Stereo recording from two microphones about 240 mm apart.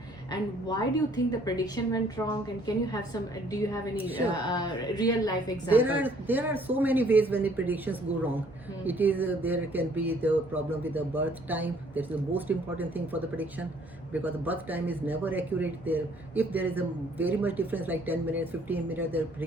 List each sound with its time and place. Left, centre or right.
0.3 s a woman's voice: centre
5.7 s speech: centre